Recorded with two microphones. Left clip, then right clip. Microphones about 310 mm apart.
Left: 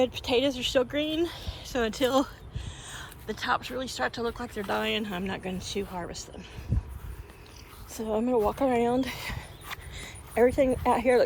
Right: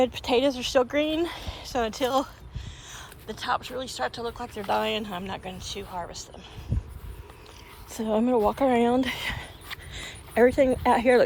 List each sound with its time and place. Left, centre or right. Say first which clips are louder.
0.0 s speech: right 3 dB; right; by 6.1 s centre
7.9 s speech: right 3 dB; right